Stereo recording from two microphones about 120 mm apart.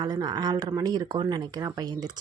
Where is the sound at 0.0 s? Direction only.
35° right (ahead or behind).